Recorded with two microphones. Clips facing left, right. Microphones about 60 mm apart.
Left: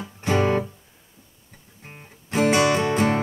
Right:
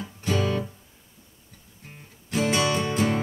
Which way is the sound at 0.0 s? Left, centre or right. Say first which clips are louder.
Left 5 dB; left.